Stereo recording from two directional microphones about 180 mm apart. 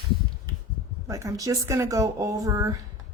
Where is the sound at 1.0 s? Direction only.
15° right (ahead or behind).